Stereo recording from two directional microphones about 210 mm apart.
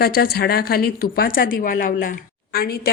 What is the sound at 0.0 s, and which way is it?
A woman's voice, 45° left (ahead or behind).